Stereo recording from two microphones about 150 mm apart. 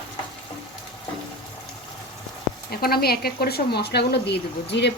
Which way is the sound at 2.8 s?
90° left.